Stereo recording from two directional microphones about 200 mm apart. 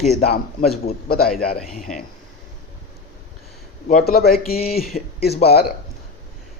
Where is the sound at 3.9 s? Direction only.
45° left (ahead or behind).